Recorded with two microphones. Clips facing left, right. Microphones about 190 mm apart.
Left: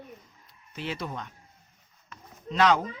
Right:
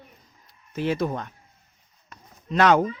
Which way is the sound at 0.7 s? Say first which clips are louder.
Right 9 dB; 45° right (ahead or behind).